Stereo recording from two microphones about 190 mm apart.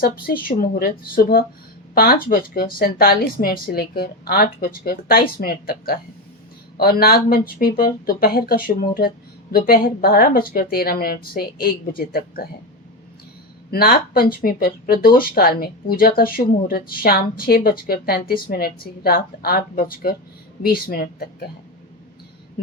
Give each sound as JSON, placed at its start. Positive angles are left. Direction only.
{"t": 0.0, "sound": "speech", "side_deg": 50}
{"t": 7.0, "sound": "speech", "side_deg": 50}
{"t": 13.7, "sound": "speech", "side_deg": 55}